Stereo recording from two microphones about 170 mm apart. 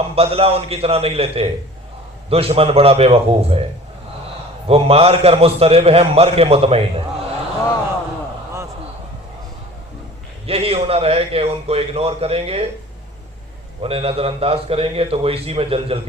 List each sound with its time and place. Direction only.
0.0 s a man's voice: 35° right (ahead or behind)
4.7 s a man's voice: 35° right (ahead or behind)
10.4 s a man's voice: 35° right (ahead or behind)
13.8 s a man's voice: 35° right (ahead or behind)